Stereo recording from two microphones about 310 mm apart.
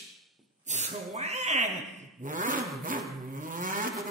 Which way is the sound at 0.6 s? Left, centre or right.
Right.